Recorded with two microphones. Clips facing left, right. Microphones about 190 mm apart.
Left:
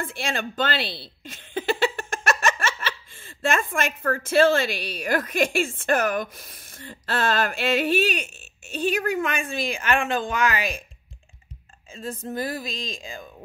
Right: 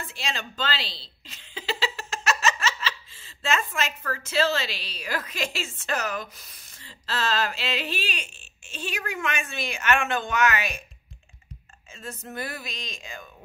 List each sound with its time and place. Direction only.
0.0 s speech: 50° left (ahead or behind); by 10.8 s 35° left (ahead or behind)
11.9 s a woman's voice: 30° left (ahead or behind)
12.3 s music: 30° left (ahead or behind)